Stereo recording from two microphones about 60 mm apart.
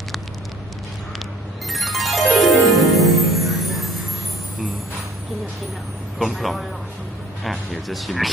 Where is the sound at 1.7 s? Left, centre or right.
Centre.